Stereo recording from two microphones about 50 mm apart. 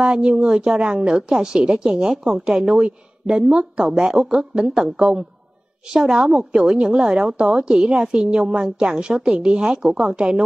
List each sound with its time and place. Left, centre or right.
0.0 s a woman's voice: centre